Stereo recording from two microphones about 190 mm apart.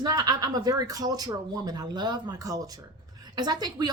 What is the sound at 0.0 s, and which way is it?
A woman's voice, 20° right (ahead or behind).